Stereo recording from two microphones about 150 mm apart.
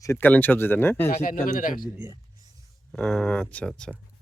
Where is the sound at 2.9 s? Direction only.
5° left (ahead or behind).